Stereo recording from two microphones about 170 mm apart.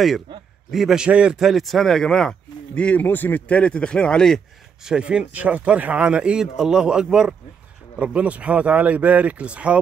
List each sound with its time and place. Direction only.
0.7 s a man's voice: centre (ahead or behind)